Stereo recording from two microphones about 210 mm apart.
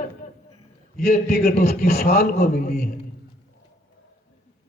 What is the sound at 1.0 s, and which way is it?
A man's voice, 45° left (ahead or behind).